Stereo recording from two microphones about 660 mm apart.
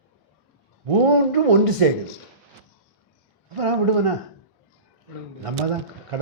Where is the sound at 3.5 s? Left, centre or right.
Right.